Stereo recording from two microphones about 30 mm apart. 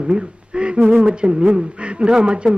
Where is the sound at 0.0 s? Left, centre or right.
Right.